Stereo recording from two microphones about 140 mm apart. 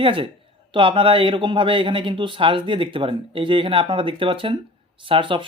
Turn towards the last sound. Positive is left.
turn(degrees=-40)  # may be behind; listen again after turning